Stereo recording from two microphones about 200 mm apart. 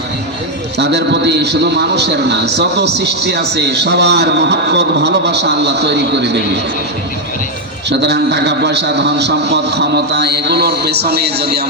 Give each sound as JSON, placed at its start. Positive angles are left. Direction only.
{"t": 0.8, "sound": "a man's voice", "side_deg": -60}
{"t": 7.9, "sound": "a man's voice", "side_deg": -60}